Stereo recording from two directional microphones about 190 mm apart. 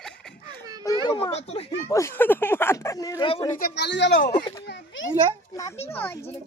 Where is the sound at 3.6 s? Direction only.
65° left (ahead or behind).